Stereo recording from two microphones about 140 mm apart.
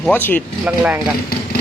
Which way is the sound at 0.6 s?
5° right (ahead or behind).